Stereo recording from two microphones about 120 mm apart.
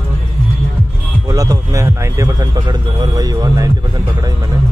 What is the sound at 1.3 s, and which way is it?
Speech, 30° right (ahead or behind).